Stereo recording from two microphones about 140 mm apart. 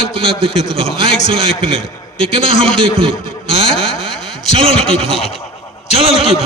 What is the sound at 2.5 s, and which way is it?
Speech, 60° left (ahead or behind).